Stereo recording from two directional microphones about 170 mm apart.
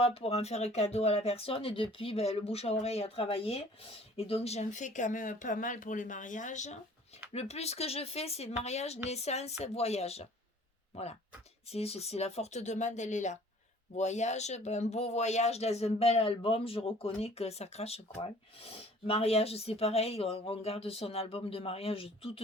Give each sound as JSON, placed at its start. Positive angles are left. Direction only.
{"t": 0.0, "sound": "speech", "side_deg": 35}
{"t": 11.7, "sound": "speech", "side_deg": 35}